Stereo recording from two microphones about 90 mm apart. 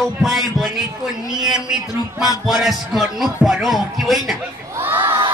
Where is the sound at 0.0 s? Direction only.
Centre (ahead or behind).